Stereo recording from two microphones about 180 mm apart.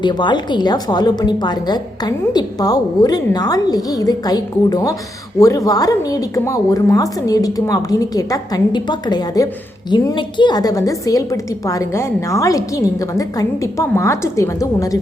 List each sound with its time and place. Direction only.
0.0 s a woman's voice: 25° left (ahead or behind)